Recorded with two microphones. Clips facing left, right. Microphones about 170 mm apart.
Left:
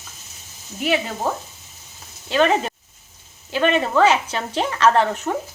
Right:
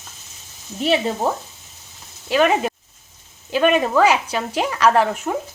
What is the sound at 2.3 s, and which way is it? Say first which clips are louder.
A woman's voice: right 1 dB; 10° right (ahead or behind).